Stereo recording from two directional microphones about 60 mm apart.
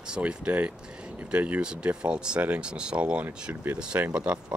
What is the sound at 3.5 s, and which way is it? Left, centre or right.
Speech, right.